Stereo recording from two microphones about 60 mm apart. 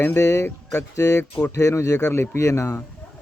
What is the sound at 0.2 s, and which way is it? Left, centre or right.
Speech, left.